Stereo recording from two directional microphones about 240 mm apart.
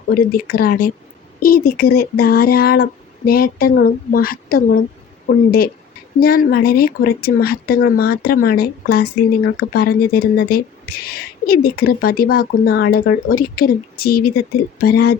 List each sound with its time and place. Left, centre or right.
0.1 s a woman's voice: left